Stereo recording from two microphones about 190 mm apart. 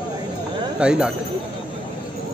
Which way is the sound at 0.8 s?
5° right (ahead or behind).